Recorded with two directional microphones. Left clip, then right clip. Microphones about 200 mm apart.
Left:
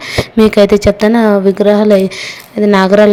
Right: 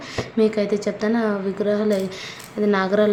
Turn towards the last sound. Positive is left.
turn(degrees=40)  # may be behind; listen again after turning